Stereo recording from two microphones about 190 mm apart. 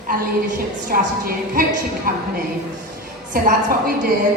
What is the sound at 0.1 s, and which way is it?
A woman's voice, 45° right (ahead or behind).